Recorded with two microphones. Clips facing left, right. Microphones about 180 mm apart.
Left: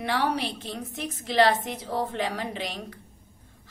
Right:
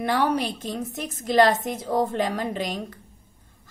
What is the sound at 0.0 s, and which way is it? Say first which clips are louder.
A woman's voice: right 4 dB; 45° right (ahead or behind).